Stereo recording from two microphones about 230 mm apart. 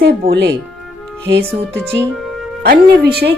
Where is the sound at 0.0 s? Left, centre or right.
Right.